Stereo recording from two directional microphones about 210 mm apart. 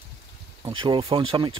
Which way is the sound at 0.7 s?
25° right (ahead or behind).